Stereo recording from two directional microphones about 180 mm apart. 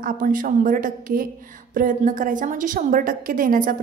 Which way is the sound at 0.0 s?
50° right (ahead or behind).